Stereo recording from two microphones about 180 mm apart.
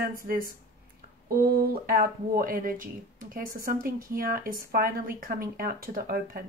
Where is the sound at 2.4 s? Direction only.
50° right (ahead or behind).